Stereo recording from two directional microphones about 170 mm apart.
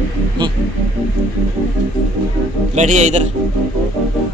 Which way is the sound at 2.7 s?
45° right (ahead or behind).